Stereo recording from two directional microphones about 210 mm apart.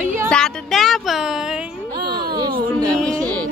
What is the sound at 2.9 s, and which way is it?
Music, 5° left (ahead or behind).